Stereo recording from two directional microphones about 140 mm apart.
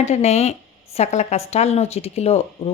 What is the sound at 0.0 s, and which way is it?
Speech, 50° left (ahead or behind).